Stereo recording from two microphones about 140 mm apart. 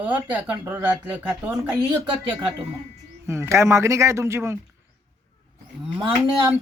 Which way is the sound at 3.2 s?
20° right (ahead or behind).